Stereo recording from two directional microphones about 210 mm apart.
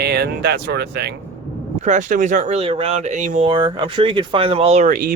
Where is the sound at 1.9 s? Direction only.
35° right (ahead or behind).